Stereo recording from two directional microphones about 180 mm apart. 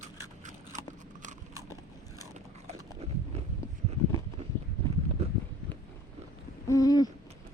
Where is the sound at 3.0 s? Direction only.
35° right (ahead or behind).